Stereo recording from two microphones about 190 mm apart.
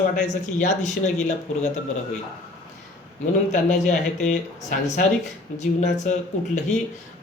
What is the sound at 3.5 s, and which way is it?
Speech, 40° left (ahead or behind).